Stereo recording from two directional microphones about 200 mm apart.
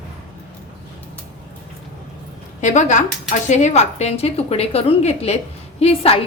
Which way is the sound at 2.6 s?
35° left (ahead or behind).